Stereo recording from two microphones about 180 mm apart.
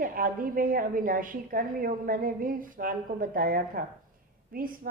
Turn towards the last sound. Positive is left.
turn(degrees=-50)  # may be behind; listen again after turning